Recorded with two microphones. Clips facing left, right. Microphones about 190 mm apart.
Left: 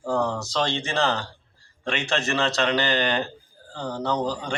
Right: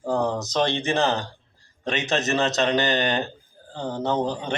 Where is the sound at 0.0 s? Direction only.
20° right (ahead or behind).